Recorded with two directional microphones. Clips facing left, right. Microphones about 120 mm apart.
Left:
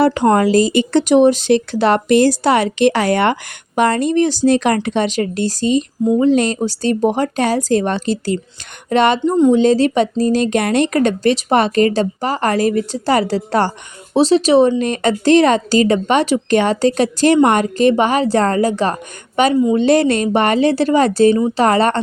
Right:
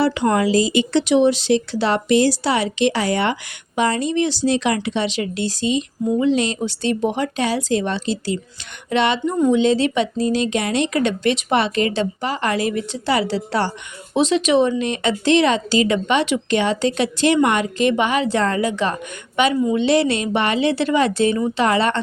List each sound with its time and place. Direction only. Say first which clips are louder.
0.0 s speech: left 5 dB; 45° left (ahead or behind)
14.1 s speech: left 5 dB; 35° left (ahead or behind)